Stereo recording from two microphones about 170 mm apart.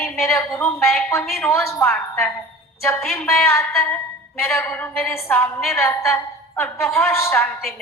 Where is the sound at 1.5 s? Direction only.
15° left (ahead or behind).